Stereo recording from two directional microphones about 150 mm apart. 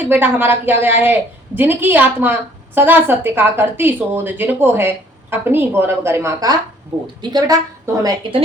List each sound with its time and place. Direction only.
0.0 s a woman's voice: 15° right (ahead or behind); by 8.4 s 35° right (ahead or behind)